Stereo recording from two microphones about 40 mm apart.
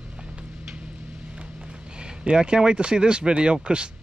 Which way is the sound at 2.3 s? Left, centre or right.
Right.